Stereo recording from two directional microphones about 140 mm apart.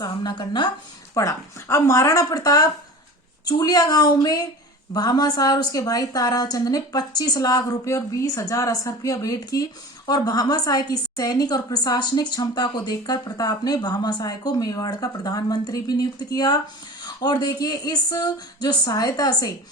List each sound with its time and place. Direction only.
0.0 s speech: 30° left (ahead or behind)
1.1 s a woman's voice: 20° left (ahead or behind)